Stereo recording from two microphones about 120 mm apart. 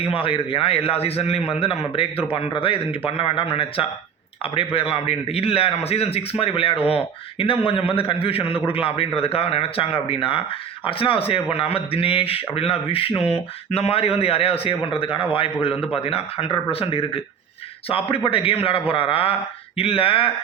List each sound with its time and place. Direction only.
0.0 s a man's voice: 50° left (ahead or behind)